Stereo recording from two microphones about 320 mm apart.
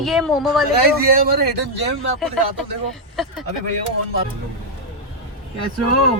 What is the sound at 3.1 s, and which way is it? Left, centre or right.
Speech, centre.